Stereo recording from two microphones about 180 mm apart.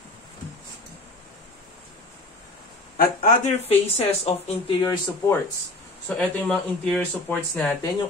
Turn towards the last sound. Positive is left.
turn(degrees=10)  # may be behind; listen again after turning